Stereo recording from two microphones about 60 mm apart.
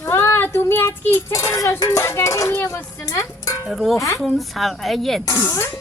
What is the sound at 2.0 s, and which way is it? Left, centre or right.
Speech, left.